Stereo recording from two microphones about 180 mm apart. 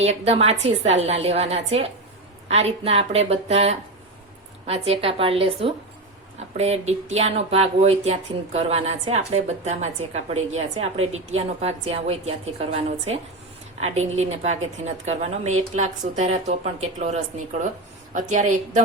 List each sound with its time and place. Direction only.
0.0 s speech: 35° right (ahead or behind)
13.7 s a woman's voice: 40° right (ahead or behind)